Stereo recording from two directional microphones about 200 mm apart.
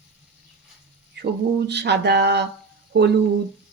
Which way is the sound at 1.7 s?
55° right (ahead or behind).